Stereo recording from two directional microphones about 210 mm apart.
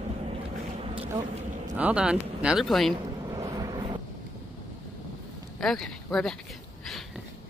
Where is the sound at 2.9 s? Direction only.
20° right (ahead or behind).